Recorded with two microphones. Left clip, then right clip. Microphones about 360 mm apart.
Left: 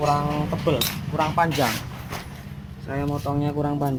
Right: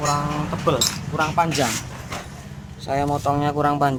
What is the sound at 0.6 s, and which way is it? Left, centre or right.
Speech, centre.